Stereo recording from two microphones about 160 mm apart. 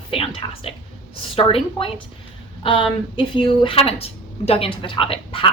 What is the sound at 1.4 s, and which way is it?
Speech, 35° left (ahead or behind).